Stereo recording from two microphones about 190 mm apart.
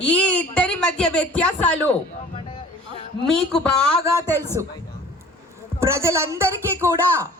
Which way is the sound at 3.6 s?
5° left (ahead or behind).